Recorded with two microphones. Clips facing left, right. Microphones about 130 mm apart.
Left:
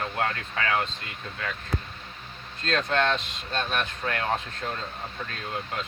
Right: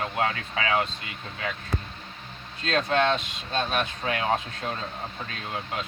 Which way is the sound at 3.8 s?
15° right (ahead or behind).